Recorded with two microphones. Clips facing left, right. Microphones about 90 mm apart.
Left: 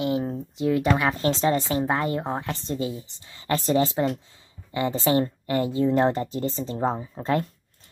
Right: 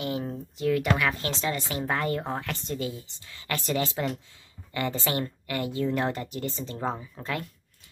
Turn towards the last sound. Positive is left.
turn(degrees=35)  # may be behind; listen again after turning